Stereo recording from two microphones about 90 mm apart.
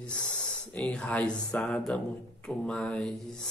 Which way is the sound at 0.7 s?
15° left (ahead or behind).